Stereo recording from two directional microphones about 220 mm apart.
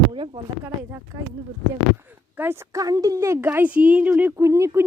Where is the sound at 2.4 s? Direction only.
10° right (ahead or behind).